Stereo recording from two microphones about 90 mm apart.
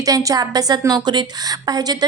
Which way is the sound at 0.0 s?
40° right (ahead or behind).